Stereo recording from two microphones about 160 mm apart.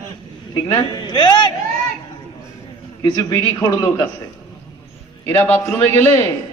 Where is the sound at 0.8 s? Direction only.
30° left (ahead or behind).